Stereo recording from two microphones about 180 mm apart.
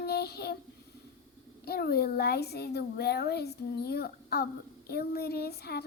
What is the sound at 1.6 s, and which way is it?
A child's voice, 60° left (ahead or behind).